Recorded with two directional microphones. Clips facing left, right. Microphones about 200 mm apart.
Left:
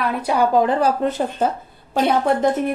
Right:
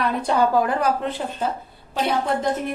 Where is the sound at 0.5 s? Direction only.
25° left (ahead or behind).